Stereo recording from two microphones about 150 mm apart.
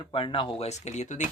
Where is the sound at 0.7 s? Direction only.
50° left (ahead or behind).